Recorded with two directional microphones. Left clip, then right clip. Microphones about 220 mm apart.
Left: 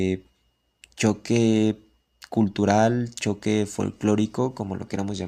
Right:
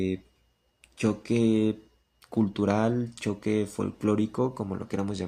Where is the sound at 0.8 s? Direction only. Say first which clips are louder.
Left 5 dB; 30° left (ahead or behind).